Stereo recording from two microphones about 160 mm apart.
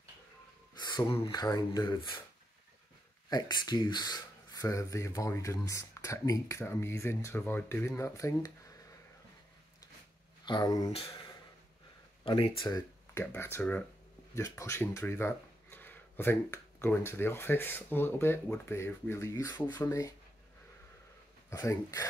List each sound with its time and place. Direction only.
0.7 s a sound: 25° left (ahead or behind)
1.2 s speech: 25° left (ahead or behind)
3.3 s speech: 25° left (ahead or behind)
10.4 s speech: 25° left (ahead or behind)
12.3 s speech: 30° left (ahead or behind)
13.2 s speech: 15° left (ahead or behind)
21.5 s speech: 20° left (ahead or behind)